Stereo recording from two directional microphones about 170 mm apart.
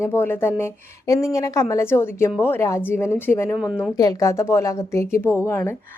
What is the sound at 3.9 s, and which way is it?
A woman's voice, 20° left (ahead or behind).